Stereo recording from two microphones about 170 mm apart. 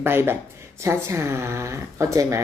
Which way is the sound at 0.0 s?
15° right (ahead or behind).